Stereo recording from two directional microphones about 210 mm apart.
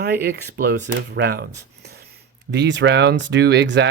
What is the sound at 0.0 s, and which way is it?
Speech, 50° right (ahead or behind).